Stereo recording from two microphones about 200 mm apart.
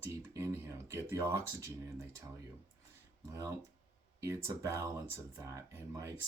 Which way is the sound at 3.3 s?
15° right (ahead or behind).